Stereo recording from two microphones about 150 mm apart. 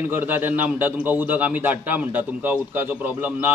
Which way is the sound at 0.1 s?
15° right (ahead or behind).